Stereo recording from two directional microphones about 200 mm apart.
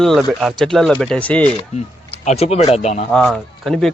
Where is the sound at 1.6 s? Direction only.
30° left (ahead or behind).